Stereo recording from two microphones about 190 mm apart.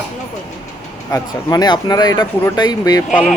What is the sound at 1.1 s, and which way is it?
Speech, 20° left (ahead or behind).